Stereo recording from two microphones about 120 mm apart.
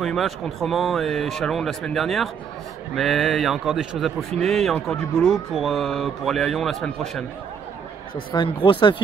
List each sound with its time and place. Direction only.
0.0 s a man's voice: centre (ahead or behind)
8.3 s speech: 45° left (ahead or behind)